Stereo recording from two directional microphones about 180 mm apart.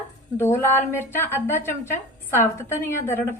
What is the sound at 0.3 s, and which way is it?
A woman's voice, 15° left (ahead or behind).